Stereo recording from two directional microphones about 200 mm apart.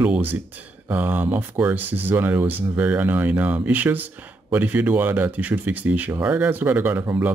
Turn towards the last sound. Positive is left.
turn(degrees=-10)  # may be behind; listen again after turning